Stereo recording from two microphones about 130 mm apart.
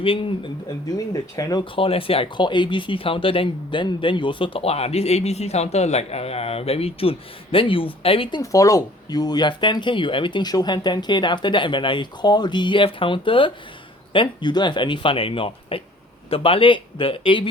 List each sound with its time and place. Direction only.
0.0 s speech: 45° left (ahead or behind)
0.9 s speech: 25° left (ahead or behind)
1.7 s speech: 45° left (ahead or behind)
8.4 s speech: 25° left (ahead or behind); by 17.5 s 40° left (ahead or behind)